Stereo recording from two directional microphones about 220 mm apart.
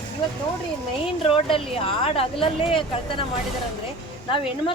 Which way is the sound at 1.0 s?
25° left (ahead or behind).